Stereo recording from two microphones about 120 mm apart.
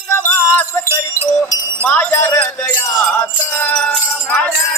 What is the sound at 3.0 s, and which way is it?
Jingle bell, 15° left (ahead or behind).